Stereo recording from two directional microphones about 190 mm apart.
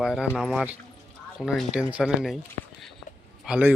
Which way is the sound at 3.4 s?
5° right (ahead or behind).